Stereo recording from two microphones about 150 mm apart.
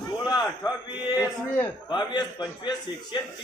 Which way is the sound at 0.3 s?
25° left (ahead or behind).